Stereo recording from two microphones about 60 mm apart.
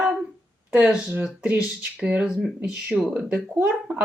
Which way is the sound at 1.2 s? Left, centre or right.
Right.